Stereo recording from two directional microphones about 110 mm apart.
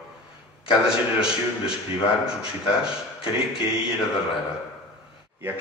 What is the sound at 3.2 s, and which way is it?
Speech, 55° left (ahead or behind).